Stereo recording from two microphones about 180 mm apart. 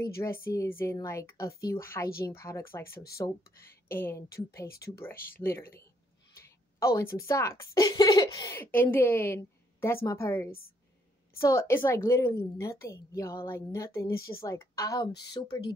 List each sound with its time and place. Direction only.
0.2 s a woman's voice: 15° left (ahead or behind)
6.3 s a sound: 15° left (ahead or behind)
7.2 s a woman's voice: 15° left (ahead or behind)